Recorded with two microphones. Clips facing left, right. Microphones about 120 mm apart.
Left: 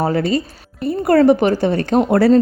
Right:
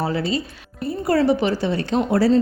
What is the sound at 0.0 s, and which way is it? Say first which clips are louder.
A woman's voice: left 5 dB; 50° left (ahead or behind).